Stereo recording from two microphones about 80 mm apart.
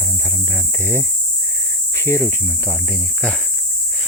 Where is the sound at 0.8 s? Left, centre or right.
Left.